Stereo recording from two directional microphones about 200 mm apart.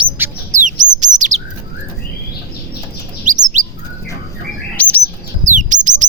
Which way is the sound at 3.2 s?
40° right (ahead or behind).